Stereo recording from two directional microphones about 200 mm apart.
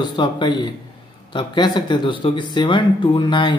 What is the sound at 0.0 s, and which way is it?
Speech, 20° left (ahead or behind).